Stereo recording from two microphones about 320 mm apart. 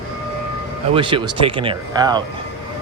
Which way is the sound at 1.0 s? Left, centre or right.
Centre.